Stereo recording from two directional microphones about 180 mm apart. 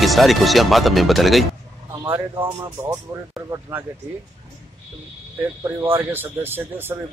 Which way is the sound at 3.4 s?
15° right (ahead or behind).